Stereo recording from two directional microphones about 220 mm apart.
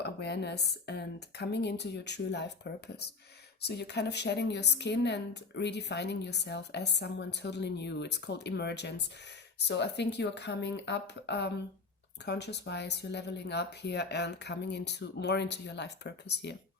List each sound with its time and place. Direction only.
0.0 s a woman's voice: 50° left (ahead or behind)